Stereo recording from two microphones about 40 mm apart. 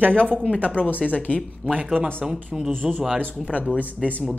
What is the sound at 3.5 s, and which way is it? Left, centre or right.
Speech, right.